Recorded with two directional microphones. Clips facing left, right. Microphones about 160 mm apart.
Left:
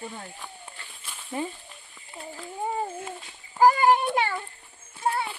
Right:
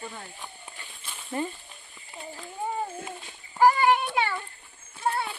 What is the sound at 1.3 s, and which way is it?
Speech, 10° left (ahead or behind).